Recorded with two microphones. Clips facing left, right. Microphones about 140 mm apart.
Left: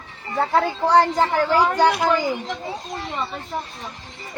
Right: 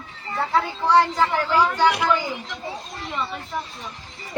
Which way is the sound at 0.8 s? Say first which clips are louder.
Left 1 dB; 45° left (ahead or behind).